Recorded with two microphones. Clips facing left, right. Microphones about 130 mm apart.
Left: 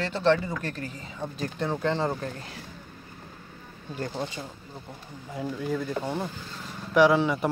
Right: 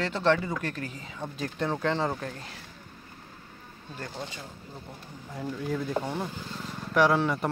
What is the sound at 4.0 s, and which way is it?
Speech, 30° left (ahead or behind).